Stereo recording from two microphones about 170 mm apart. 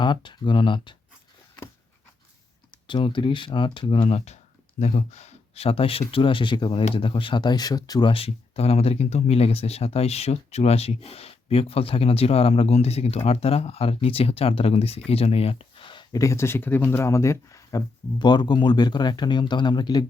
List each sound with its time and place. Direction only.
0.0 s speech: 25° left (ahead or behind)
2.8 s speech: 30° left (ahead or behind)